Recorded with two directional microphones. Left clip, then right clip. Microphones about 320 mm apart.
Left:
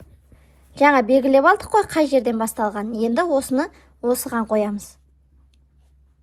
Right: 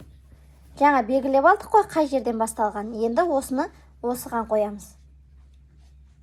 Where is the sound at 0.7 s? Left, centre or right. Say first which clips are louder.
Left 4 dB; left.